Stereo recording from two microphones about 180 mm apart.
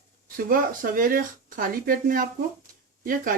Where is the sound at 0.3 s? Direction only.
50° right (ahead or behind).